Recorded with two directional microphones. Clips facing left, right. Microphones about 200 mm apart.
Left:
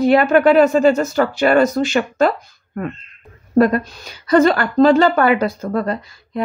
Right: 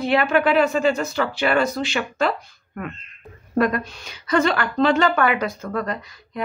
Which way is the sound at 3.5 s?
35° left (ahead or behind).